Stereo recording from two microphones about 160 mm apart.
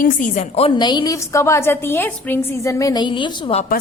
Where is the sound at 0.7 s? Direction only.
25° left (ahead or behind).